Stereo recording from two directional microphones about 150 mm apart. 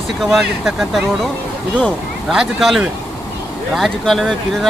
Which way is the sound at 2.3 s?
Centre (ahead or behind).